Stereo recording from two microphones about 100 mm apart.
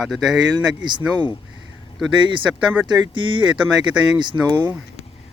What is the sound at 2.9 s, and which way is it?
Speech, 55° right (ahead or behind).